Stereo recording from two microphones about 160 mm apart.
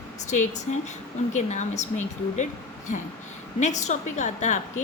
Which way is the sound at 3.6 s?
50° left (ahead or behind).